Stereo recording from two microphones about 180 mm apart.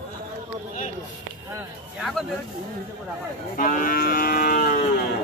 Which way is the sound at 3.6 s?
50° left (ahead or behind).